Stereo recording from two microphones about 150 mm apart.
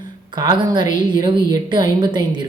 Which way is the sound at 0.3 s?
30° right (ahead or behind).